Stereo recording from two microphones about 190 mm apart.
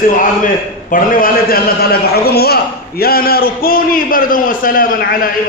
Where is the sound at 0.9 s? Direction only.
50° left (ahead or behind).